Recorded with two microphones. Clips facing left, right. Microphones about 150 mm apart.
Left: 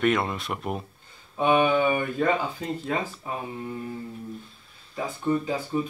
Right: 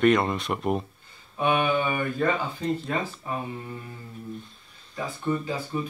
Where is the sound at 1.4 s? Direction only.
20° left (ahead or behind).